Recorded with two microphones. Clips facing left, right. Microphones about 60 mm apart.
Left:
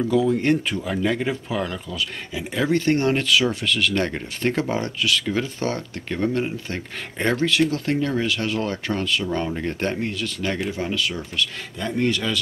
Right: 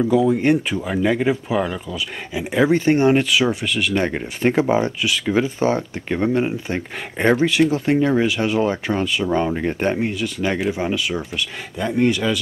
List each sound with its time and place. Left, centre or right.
0.0 s speech: centre